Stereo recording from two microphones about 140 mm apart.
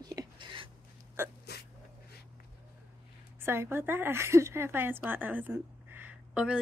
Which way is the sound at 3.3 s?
15° right (ahead or behind).